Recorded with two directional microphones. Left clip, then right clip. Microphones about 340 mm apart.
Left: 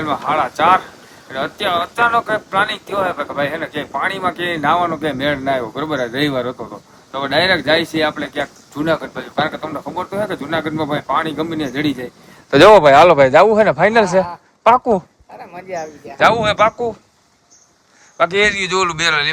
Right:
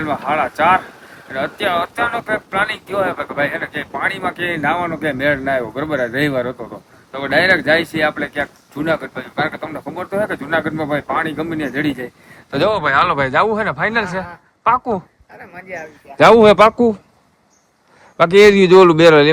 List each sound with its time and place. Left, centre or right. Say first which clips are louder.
0.0 s speech: left 1 dB; centre
12.5 s speech: left 10 dB; left
12.8 s a man's voice: left 7 dB; centre
16.1 s speech: right 5 dB; centre
18.2 s speech: right 6 dB; centre